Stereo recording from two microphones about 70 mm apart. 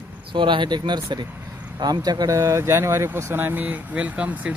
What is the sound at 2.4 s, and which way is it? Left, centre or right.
Speech, right.